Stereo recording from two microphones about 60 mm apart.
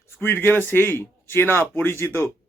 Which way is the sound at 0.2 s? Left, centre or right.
Left.